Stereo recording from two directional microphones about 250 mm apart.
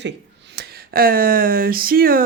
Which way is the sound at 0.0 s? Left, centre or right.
Right.